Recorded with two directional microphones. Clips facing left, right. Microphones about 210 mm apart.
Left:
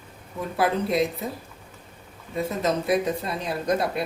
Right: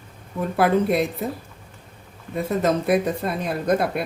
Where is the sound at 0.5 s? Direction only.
55° right (ahead or behind).